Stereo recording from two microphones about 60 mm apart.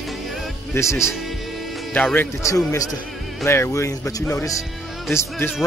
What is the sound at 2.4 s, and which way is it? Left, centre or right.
Speech, left.